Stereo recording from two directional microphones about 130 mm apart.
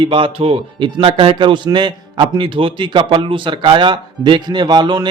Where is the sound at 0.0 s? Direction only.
40° right (ahead or behind).